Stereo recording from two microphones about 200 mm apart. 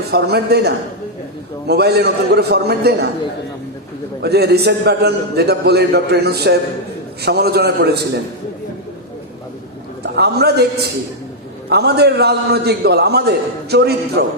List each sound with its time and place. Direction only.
0.1 s a man's voice: 55° right (ahead or behind)
4.2 s a man's voice: 55° right (ahead or behind)
10.0 s a man's voice: 55° right (ahead or behind)